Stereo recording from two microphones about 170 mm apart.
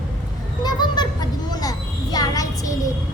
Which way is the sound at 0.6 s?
25° left (ahead or behind).